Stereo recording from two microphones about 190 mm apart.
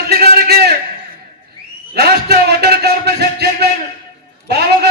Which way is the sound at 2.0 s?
55° right (ahead or behind).